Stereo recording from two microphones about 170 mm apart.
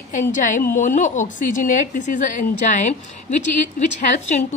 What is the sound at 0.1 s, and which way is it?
A woman's voice, 50° left (ahead or behind).